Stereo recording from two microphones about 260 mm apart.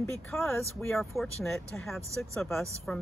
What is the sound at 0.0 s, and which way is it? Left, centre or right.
Speech, centre.